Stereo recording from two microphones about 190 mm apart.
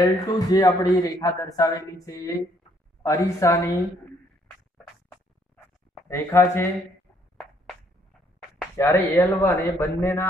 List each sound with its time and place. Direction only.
0.0 s speech: 20° left (ahead or behind)
6.0 s speech: 15° left (ahead or behind)
8.7 s speech: 15° left (ahead or behind)